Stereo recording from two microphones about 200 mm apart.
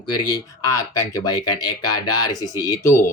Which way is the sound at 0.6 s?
15° left (ahead or behind).